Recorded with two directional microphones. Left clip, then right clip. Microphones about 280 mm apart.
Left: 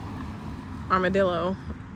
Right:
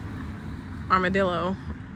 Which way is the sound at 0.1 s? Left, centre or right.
Centre.